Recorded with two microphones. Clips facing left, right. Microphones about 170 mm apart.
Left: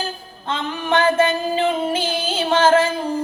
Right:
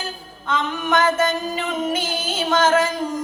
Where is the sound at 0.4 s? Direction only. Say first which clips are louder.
Right 1 dB; 30° left (ahead or behind).